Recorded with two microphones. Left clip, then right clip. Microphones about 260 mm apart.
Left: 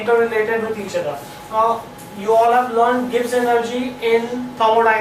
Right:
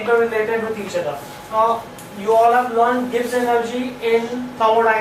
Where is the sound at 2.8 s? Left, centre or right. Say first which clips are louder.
Left 1 dB; centre.